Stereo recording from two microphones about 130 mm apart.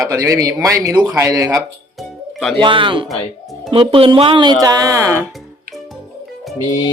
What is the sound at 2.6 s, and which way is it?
Speech, 40° right (ahead or behind).